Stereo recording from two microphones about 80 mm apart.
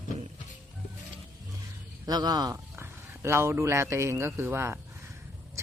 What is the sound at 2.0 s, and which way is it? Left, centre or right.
Speech, right.